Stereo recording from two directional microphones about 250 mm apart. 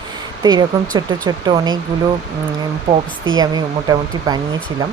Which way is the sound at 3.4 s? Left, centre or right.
Centre.